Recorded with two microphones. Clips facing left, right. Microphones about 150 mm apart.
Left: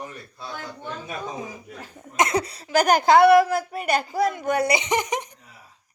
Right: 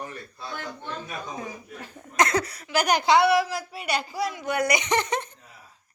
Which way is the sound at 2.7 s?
45° left (ahead or behind).